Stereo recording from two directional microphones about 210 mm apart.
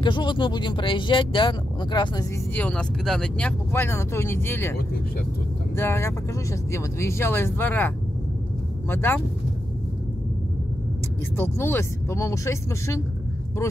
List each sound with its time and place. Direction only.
0.0 s speech: 20° left (ahead or behind)
2.5 s speech: 5° left (ahead or behind)
5.8 s speech: 10° left (ahead or behind)
11.3 s speech: 10° left (ahead or behind)